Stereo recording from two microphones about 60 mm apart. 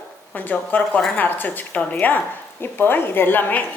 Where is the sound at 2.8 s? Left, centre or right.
Left.